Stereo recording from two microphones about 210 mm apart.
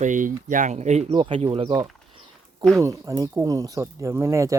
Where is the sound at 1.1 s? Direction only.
20° right (ahead or behind).